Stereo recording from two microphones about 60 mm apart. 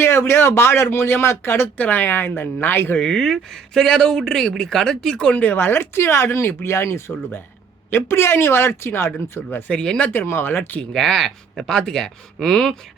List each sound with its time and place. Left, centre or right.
0.0 s speech: left
3.0 s speech: centre
5.4 s speech: left
9.6 s speech: centre
10.1 s speech: left
10.9 s speech: centre